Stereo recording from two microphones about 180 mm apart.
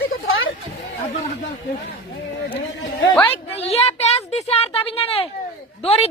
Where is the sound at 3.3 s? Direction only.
35° left (ahead or behind).